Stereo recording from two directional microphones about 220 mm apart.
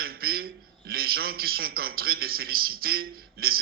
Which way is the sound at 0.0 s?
45° right (ahead or behind).